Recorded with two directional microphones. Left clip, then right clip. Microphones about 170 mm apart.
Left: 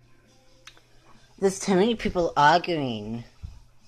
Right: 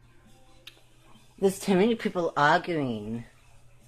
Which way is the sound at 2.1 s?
20° left (ahead or behind).